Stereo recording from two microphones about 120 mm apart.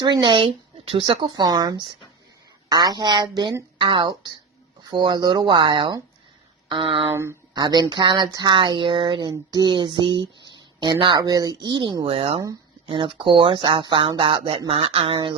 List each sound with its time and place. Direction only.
0.0 s speech: 40° right (ahead or behind)
7.1 s speech: 20° right (ahead or behind)
7.5 s speech: 35° right (ahead or behind)
11.2 s speech: 30° right (ahead or behind)